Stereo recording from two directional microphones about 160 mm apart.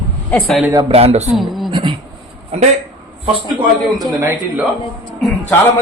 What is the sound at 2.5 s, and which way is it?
Speech, 45° right (ahead or behind).